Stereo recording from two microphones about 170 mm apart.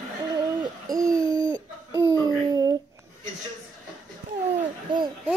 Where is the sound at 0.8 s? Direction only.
20° right (ahead or behind).